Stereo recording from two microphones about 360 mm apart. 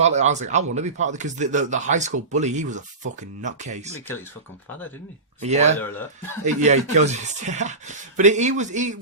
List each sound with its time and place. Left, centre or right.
0.0 s speech: centre
5.4 s speech: centre